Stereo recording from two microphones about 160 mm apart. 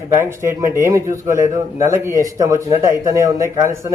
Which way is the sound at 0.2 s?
15° right (ahead or behind).